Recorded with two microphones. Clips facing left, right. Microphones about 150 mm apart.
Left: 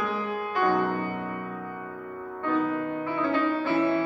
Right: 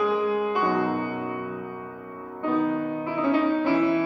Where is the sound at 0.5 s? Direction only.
15° right (ahead or behind).